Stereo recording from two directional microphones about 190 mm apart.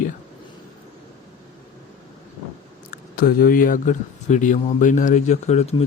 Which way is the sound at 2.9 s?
50° left (ahead or behind).